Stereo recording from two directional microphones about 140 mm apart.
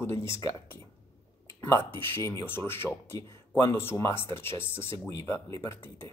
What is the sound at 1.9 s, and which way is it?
Speech, 15° left (ahead or behind).